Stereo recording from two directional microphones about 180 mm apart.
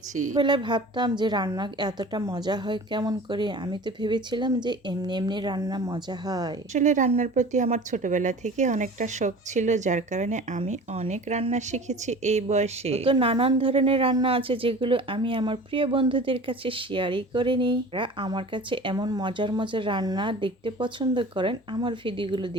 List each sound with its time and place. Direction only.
0.1 s speech: 45° right (ahead or behind)
0.3 s a woman's voice: 25° right (ahead or behind)
6.7 s a woman's voice: 45° right (ahead or behind); by 22.5 s 25° right (ahead or behind)